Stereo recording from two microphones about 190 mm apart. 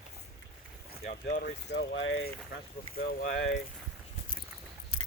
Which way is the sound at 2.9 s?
50° left (ahead or behind).